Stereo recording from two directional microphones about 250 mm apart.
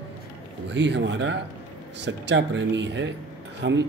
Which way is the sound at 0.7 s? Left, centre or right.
Right.